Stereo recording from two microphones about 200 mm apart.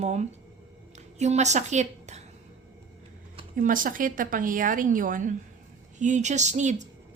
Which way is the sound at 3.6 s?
45° right (ahead or behind).